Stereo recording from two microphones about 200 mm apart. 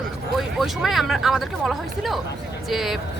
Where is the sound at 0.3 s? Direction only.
Centre (ahead or behind).